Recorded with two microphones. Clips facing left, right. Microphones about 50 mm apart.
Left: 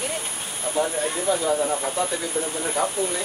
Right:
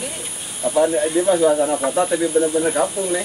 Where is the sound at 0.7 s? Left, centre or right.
Right.